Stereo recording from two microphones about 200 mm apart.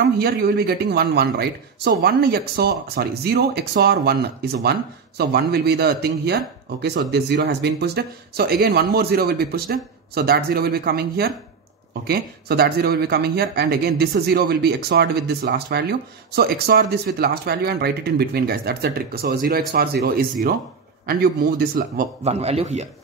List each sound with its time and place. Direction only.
0.0 s speech: 50° right (ahead or behind)
22.3 s a man's voice: 30° right (ahead or behind)